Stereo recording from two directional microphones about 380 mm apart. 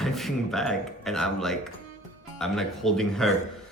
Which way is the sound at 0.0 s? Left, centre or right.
Centre.